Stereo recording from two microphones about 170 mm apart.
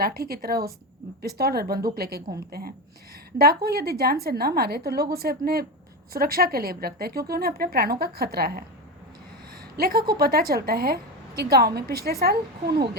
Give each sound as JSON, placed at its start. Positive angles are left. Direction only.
{"t": 0.0, "sound": "a woman's voice", "side_deg": -65}
{"t": 9.7, "sound": "a woman's voice", "side_deg": -65}